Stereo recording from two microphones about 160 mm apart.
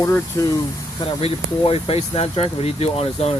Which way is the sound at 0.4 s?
20° left (ahead or behind).